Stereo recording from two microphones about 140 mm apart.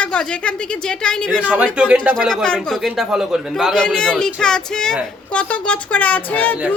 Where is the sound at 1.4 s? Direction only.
10° right (ahead or behind).